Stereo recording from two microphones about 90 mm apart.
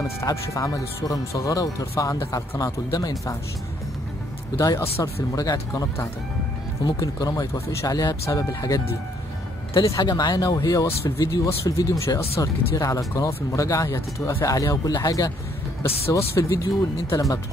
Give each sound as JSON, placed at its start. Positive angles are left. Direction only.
{"t": 0.2, "sound": "speech", "side_deg": 35}
{"t": 4.6, "sound": "speech", "side_deg": 35}
{"t": 9.8, "sound": "speech", "side_deg": 50}
{"t": 11.4, "sound": "speech", "side_deg": 35}